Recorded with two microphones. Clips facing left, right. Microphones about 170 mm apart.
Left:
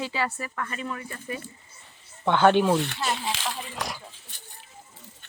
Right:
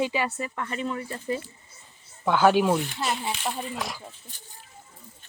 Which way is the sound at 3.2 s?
90° left.